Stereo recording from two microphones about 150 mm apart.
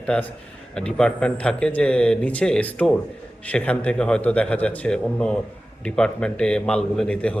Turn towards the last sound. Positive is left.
turn(degrees=10)  # may be behind; listen again after turning